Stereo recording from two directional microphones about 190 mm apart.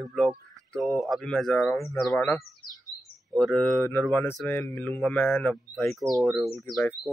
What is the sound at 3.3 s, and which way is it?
Speech, 5° left (ahead or behind).